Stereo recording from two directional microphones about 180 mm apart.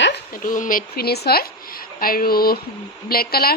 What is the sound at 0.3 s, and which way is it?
A woman's voice, 50° left (ahead or behind).